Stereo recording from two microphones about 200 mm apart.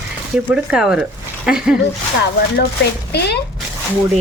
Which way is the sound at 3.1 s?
55° left (ahead or behind).